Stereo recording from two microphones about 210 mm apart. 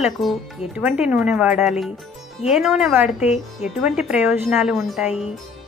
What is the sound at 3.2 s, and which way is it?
Speech, 30° left (ahead or behind).